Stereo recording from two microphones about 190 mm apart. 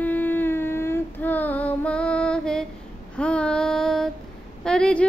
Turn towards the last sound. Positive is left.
turn(degrees=5)  # may be behind; listen again after turning